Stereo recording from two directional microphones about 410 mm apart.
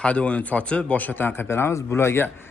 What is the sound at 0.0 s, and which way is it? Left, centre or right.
Speech, centre.